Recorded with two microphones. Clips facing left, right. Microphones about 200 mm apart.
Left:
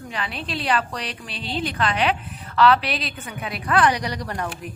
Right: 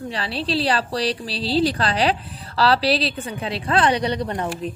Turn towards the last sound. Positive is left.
turn(degrees=-25)  # may be behind; listen again after turning